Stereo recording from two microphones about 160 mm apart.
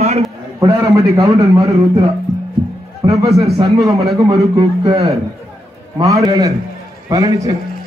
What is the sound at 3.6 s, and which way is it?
Speech, centre (ahead or behind).